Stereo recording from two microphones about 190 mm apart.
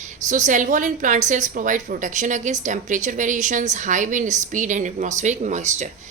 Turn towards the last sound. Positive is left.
turn(degrees=-40)  # may be behind; listen again after turning